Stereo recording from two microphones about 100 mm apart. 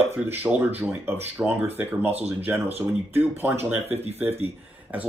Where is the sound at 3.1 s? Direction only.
20° right (ahead or behind).